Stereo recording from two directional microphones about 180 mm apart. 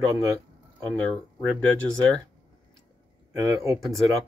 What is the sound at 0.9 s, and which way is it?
Speech, 5° left (ahead or behind).